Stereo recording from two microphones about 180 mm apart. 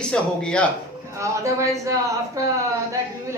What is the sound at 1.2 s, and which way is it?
A woman's voice, 15° right (ahead or behind).